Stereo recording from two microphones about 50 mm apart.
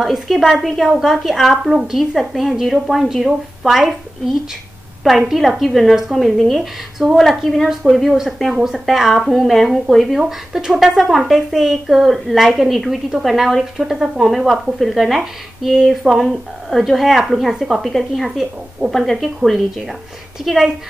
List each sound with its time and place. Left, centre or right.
0.0 s a woman's voice: centre
10.2 s a woman's voice: centre